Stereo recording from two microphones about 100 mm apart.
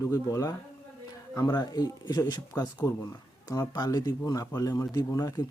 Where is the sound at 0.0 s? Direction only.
35° left (ahead or behind).